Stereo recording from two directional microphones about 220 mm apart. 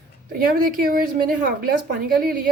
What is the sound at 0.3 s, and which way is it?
Speech, 40° right (ahead or behind).